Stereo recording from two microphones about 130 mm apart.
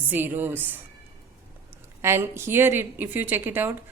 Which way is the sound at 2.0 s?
20° right (ahead or behind).